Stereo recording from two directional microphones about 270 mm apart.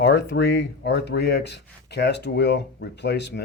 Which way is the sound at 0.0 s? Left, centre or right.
Left.